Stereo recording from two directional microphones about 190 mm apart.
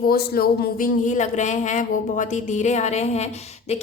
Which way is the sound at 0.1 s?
55° left (ahead or behind).